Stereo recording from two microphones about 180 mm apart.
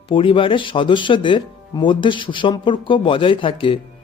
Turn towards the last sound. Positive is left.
turn(degrees=30)  # may be behind; listen again after turning